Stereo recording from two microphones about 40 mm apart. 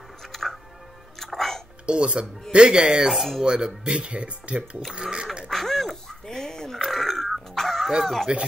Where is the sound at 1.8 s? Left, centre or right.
Right.